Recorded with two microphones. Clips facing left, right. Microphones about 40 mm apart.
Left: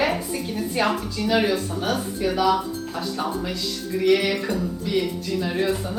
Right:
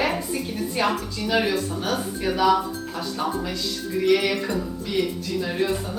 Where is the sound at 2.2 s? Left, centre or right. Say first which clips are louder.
Right 1 dB; centre.